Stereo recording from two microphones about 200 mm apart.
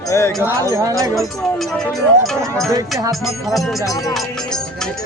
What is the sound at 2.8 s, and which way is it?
Speech, 15° right (ahead or behind).